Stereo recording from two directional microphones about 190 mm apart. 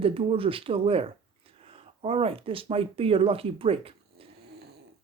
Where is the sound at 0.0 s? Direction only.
30° right (ahead or behind).